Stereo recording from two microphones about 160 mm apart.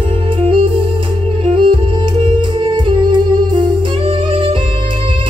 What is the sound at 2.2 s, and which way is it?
Music, 30° right (ahead or behind).